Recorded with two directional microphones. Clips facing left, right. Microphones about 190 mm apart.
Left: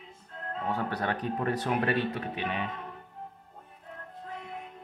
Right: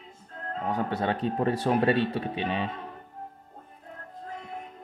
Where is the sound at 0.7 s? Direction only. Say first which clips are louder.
Right 3 dB; 20° right (ahead or behind).